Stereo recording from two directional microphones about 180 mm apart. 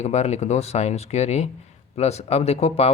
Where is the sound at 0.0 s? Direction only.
40° left (ahead or behind).